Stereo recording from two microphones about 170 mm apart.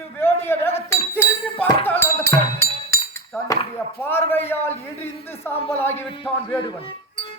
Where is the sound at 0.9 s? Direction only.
15° left (ahead or behind).